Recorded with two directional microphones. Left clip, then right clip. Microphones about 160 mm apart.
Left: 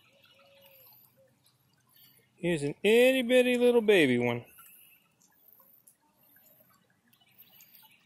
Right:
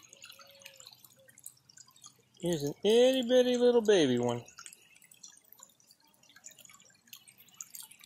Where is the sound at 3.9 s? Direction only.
65° left (ahead or behind).